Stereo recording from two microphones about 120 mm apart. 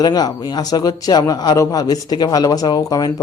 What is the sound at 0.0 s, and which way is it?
Speech, 35° left (ahead or behind).